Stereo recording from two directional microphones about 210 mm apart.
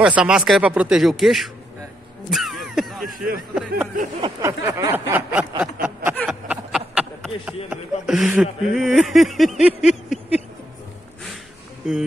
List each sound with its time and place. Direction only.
0.0 s speech: 5° right (ahead or behind)
2.3 s a sound: centre (ahead or behind)
3.5 s speech: 5° right (ahead or behind)
4.2 s a sound: 15° right (ahead or behind)
5.6 s snicker: 10° right (ahead or behind)
6.1 s speech: 5° right (ahead or behind)